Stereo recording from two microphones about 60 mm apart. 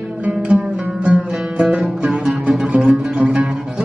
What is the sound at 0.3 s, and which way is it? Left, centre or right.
Music, centre.